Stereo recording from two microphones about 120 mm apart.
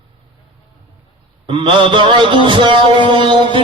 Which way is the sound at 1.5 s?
45° right (ahead or behind).